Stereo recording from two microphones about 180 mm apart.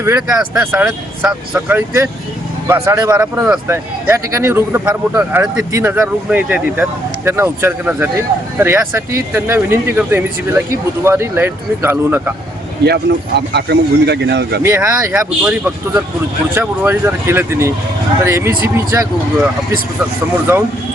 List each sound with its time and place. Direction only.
0.0 s speech: 15° right (ahead or behind)
12.8 s speech: 70° right (ahead or behind)
14.6 s speech: 15° right (ahead or behind)